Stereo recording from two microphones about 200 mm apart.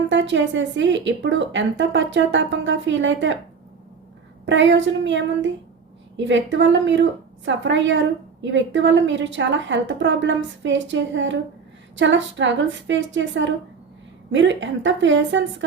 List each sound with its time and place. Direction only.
0.1 s a woman's voice: 65° right (ahead or behind)
4.4 s a woman's voice: 65° right (ahead or behind)